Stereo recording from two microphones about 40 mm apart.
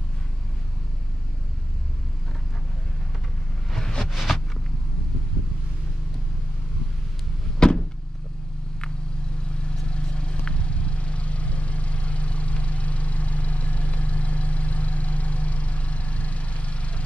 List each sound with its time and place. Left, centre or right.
4.0 s a sound: centre
7.5 s vehicle: left
9.8 s vehicle: left